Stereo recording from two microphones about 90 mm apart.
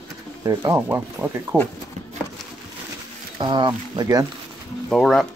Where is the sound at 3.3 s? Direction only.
60° right (ahead or behind); by 4.3 s 45° right (ahead or behind).